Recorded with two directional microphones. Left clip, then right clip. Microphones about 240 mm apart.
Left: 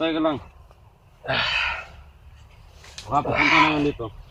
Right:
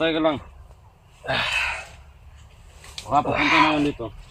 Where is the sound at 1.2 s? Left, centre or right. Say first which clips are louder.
Even; centre.